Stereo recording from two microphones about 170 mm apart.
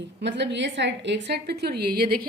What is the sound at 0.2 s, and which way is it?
A woman's voice, 90° right.